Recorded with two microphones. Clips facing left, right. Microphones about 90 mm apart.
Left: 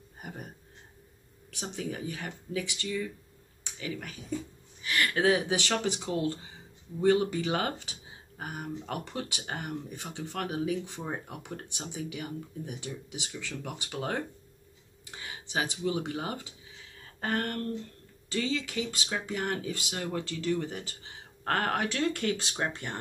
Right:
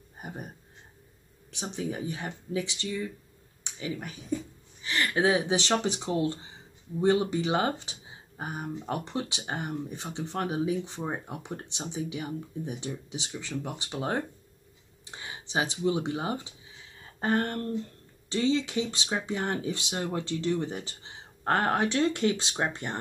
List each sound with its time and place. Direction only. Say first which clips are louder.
0.2 s a sound: right 3 dB; 20° right (ahead or behind)
1.5 s speech: right 3 dB; 20° right (ahead or behind)
4.8 s speech: even; 25° right (ahead or behind)